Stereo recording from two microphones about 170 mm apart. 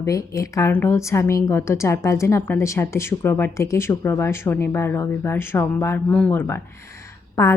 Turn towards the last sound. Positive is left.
turn(degrees=15)  # may be behind; listen again after turning